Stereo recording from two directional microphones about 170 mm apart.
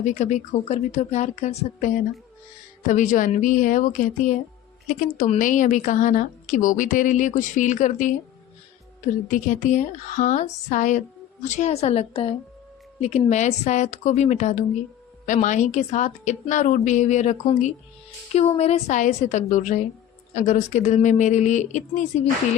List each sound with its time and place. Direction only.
0.0 s a woman's voice: 45° left (ahead or behind)
9.3 s a woman's voice: 45° left (ahead or behind)